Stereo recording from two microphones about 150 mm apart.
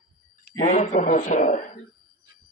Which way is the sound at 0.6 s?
55° left (ahead or behind).